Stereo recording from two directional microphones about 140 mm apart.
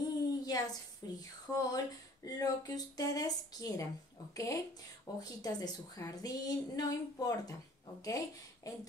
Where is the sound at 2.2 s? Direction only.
25° left (ahead or behind).